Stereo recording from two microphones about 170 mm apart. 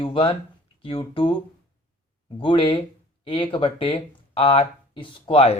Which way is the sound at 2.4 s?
30° left (ahead or behind).